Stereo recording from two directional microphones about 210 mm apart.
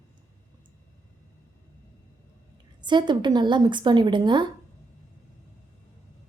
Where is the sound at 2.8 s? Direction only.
20° right (ahead or behind).